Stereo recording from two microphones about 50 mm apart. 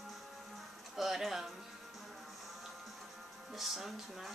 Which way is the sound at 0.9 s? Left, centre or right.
Centre.